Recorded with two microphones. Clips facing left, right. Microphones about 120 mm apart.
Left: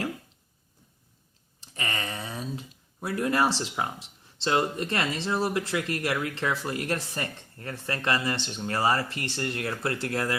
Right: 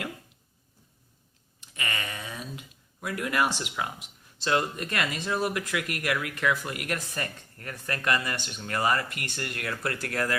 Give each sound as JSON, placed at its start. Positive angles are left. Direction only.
{"t": 1.6, "sound": "speech", "side_deg": 35}